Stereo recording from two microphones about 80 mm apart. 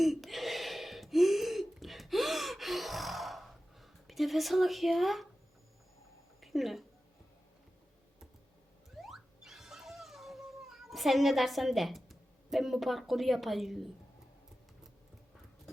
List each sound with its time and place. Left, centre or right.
0.0 s gasp: centre
6.4 s a sound: centre
9.0 s music: centre